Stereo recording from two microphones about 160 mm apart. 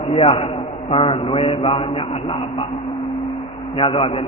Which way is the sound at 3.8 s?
35° left (ahead or behind).